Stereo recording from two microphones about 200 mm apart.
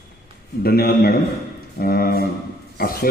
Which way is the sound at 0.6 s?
50° left (ahead or behind).